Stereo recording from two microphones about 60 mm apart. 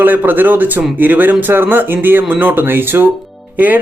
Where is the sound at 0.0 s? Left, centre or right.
Right.